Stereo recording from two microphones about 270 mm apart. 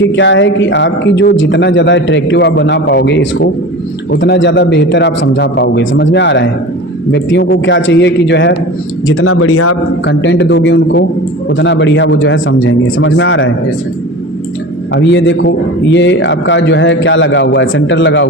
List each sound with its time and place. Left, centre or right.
0.2 s a man's voice: left
10.1 s a man's voice: left
14.9 s a man's voice: left